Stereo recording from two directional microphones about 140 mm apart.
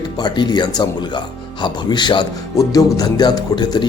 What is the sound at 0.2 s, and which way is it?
Speech, 30° left (ahead or behind).